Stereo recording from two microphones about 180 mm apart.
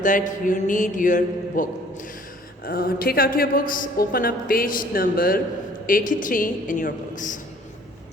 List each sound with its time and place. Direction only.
0.0 s a woman's voice: 45° left (ahead or behind)